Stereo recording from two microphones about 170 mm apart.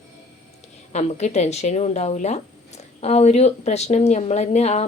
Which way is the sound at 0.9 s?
40° left (ahead or behind).